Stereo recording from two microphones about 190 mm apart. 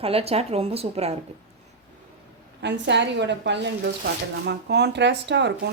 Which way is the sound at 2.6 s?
65° right (ahead or behind).